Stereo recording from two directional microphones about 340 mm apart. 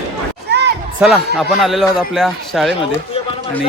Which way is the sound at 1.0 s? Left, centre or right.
Centre.